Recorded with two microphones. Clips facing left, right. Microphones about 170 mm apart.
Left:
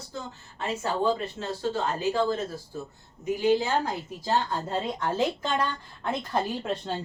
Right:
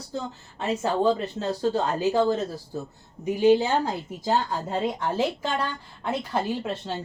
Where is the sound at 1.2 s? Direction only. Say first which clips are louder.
Right 4 dB; 35° right (ahead or behind).